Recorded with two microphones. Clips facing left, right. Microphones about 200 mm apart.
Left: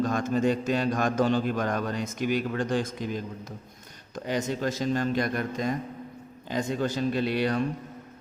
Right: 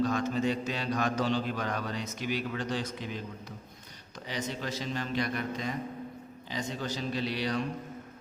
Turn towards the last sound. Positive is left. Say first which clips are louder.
# left 6 dB
turn(degrees=55)  # may be behind; listen again after turning